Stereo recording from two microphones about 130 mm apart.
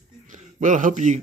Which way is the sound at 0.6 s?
80° right.